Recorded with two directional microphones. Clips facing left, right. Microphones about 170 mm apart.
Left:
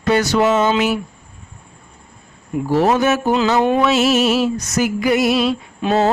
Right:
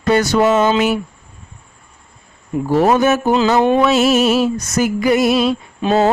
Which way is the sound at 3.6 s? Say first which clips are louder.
Right 2 dB; 30° right (ahead or behind).